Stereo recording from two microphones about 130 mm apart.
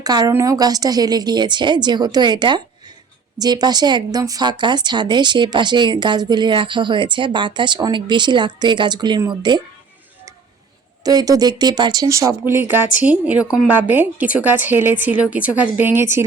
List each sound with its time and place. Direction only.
0.0 s speech: 30° right (ahead or behind)
11.0 s speech: 30° right (ahead or behind)
12.7 s speech: 10° right (ahead or behind)